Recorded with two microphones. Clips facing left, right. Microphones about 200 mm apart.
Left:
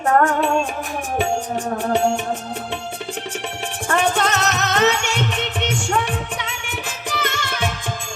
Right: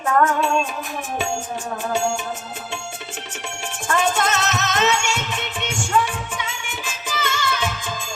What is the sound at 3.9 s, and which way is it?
Music, 60° left (ahead or behind).